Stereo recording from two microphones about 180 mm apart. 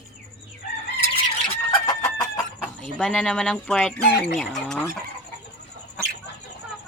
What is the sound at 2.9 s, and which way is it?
Speech, 5° left (ahead or behind).